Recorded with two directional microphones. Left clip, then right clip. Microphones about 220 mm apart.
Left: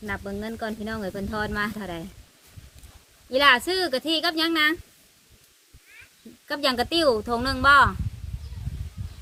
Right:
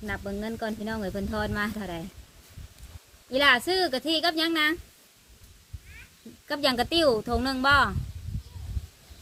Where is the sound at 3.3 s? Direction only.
5° left (ahead or behind).